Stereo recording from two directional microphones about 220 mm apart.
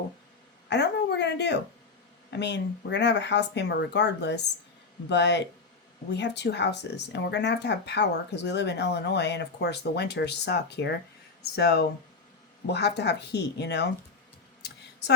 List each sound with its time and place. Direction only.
0.7 s a woman's voice: 50° left (ahead or behind)